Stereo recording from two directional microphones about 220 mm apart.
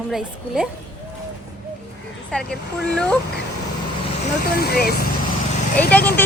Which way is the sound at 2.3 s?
5° left (ahead or behind).